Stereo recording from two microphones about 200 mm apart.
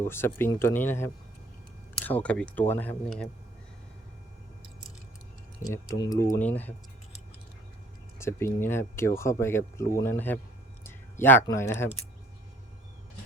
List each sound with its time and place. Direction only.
0.0 s speech: 10° left (ahead or behind)
5.6 s speech: 15° left (ahead or behind)
8.2 s speech: 10° left (ahead or behind)